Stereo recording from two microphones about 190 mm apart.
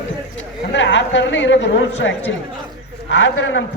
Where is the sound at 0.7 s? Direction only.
75° left (ahead or behind).